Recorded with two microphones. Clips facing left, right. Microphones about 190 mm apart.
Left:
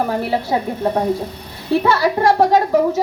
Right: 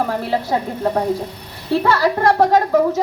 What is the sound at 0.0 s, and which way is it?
Speech, 15° left (ahead or behind).